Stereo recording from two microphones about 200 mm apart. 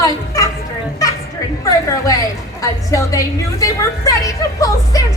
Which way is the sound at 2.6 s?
15° left (ahead or behind).